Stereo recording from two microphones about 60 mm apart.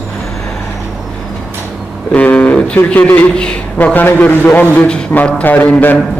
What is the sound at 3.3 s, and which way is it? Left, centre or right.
Speech, centre.